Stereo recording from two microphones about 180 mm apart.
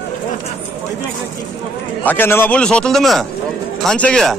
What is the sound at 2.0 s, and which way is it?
A man's voice, 10° left (ahead or behind).